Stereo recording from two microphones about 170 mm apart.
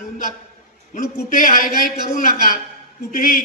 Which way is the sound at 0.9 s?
55° left (ahead or behind).